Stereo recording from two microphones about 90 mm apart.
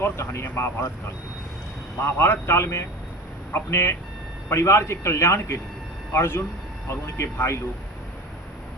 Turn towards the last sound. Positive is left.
turn(degrees=30)  # may be behind; listen again after turning